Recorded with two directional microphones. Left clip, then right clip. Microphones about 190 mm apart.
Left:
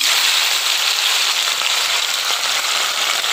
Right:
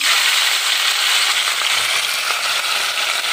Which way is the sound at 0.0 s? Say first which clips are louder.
Even; 35° left (ahead or behind).